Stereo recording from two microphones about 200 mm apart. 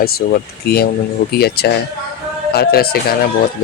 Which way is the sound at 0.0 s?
50° left (ahead or behind).